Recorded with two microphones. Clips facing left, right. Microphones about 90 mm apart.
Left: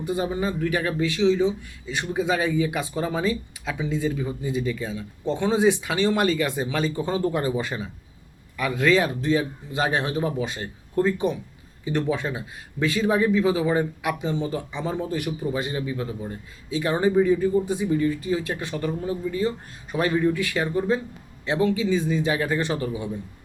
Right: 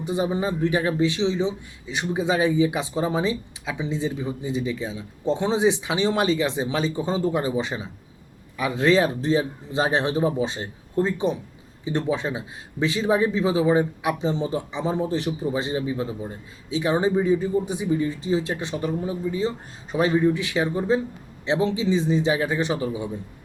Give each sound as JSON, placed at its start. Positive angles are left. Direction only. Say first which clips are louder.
{"t": 0.0, "sound": "a man's voice", "louder": "right 1 dB", "side_deg": -20}